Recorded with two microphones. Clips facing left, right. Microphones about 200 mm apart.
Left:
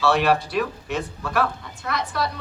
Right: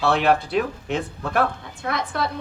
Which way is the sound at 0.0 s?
55° right (ahead or behind).